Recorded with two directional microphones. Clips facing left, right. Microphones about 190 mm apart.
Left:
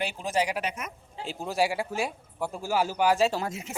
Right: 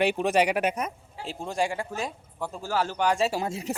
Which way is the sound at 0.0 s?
65° right (ahead or behind).